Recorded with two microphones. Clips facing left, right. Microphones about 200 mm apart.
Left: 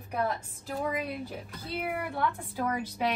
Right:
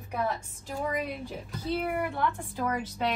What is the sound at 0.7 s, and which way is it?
A woman's voice, centre (ahead or behind).